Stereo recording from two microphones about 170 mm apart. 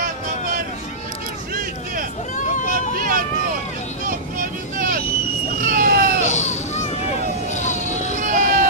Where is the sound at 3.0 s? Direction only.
55° right (ahead or behind).